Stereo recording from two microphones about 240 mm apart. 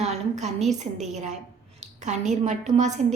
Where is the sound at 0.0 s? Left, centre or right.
Right.